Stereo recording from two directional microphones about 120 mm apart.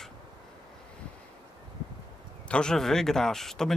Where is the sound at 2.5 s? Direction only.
5° left (ahead or behind).